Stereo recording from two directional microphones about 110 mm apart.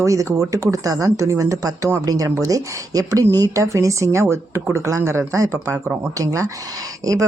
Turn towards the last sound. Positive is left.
turn(degrees=-30)  # may be behind; listen again after turning